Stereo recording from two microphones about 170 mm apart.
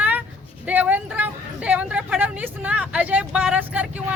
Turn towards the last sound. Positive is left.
turn(degrees=-10)  # may be behind; listen again after turning